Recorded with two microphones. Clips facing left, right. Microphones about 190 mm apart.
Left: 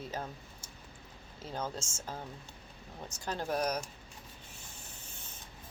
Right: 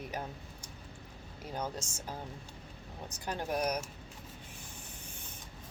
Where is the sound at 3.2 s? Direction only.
10° right (ahead or behind).